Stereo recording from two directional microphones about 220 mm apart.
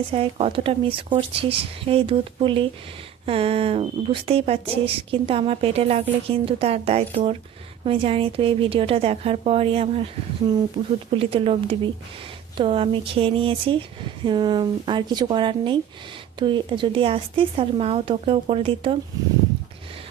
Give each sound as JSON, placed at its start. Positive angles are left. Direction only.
{"t": 0.1, "sound": "speech", "side_deg": -25}